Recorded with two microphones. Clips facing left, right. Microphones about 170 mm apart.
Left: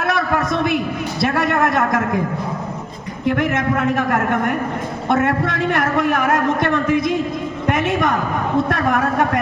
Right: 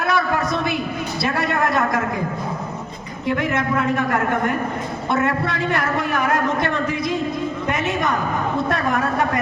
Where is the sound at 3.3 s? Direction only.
55° left (ahead or behind).